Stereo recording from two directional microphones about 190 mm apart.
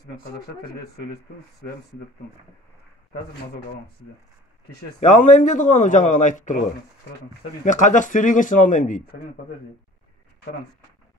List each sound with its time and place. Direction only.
5.0 s a man's voice: 40° left (ahead or behind)
7.6 s speech: 40° left (ahead or behind)